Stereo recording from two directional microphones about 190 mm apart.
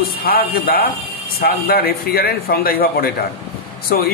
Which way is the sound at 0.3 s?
50° left (ahead or behind).